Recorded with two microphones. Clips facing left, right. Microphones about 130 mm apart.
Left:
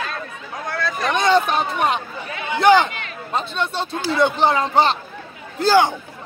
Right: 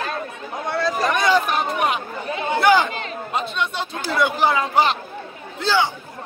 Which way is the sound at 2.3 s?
35° right (ahead or behind).